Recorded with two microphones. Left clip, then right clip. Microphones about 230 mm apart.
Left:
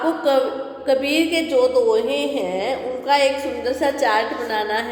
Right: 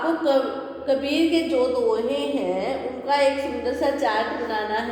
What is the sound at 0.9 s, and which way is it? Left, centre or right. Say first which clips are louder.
Speech: left 3 dB; left.